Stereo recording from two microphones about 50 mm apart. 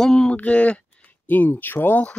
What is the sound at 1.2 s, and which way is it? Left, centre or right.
Speech, left.